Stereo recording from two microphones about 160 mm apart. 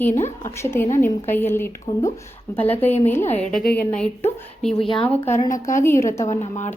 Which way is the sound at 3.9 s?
15° left (ahead or behind).